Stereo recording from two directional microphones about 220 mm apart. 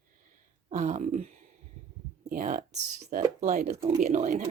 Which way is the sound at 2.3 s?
35° right (ahead or behind).